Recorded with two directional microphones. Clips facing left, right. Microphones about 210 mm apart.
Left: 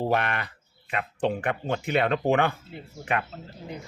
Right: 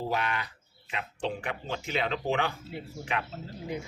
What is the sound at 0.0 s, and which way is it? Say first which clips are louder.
Speech: left 5 dB; 60° left (ahead or behind).